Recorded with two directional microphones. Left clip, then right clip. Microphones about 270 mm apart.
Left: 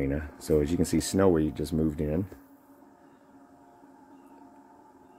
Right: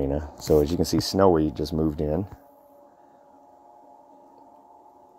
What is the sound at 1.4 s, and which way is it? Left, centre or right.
Speech, centre.